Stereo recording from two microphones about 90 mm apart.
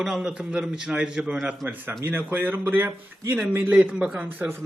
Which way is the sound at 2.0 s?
25° right (ahead or behind).